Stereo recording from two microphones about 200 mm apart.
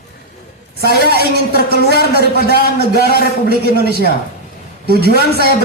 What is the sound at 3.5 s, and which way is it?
A man's voice, 50° right (ahead or behind).